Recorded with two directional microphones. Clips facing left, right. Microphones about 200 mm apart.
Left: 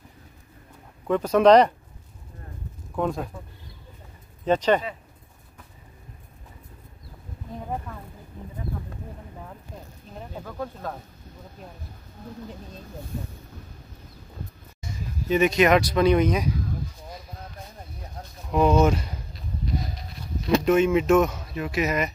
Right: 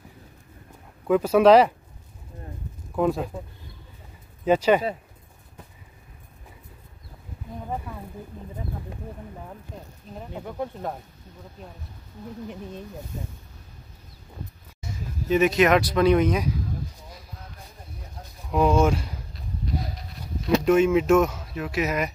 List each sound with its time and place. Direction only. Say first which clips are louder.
1.0 s speech: right 1 dB; 5° right (ahead or behind)
3.0 s speech: right 3 dB; 5° right (ahead or behind)
4.5 s speech: right 2 dB; 10° right (ahead or behind)
10.3 s speech: right 2 dB; 20° right (ahead or behind)
14.8 s speech: even; 5° right (ahead or behind)
18.5 s speech: left 1 dB; 5° right (ahead or behind)
20.4 s speech: right 1 dB; centre (ahead or behind)